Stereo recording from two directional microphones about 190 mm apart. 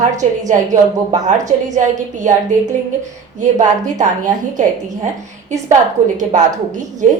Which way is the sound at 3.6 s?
40° right (ahead or behind).